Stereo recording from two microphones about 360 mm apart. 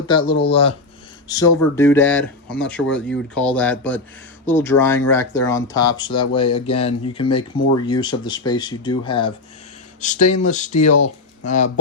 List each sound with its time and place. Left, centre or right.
0.1 s speech: centre
10.7 s speech: left
11.0 s speech: centre